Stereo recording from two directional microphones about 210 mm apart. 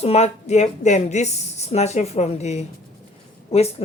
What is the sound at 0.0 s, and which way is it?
A woman's voice, 30° left (ahead or behind).